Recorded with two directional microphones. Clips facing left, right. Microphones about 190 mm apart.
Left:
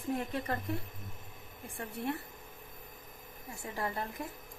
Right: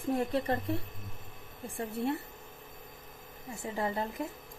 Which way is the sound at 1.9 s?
25° right (ahead or behind).